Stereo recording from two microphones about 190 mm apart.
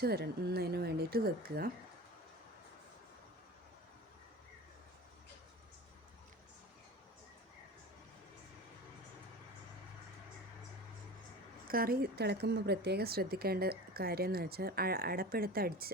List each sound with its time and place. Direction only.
0.0 s speech: 55° right (ahead or behind)
11.7 s a woman's voice: 50° right (ahead or behind)